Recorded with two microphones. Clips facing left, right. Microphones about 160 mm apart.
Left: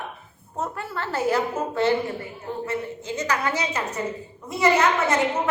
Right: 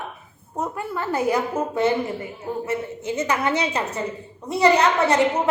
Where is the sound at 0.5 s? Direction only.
15° right (ahead or behind).